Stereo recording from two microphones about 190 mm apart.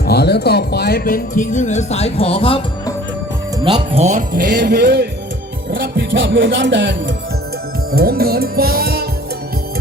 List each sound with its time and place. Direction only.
0.0 s speech: 60° left (ahead or behind); by 2.9 s 25° left (ahead or behind)
3.6 s speech: 25° right (ahead or behind)
4.0 s speech: 45° right (ahead or behind); by 6.9 s 70° right (ahead or behind)
7.9 s music: 55° right (ahead or behind)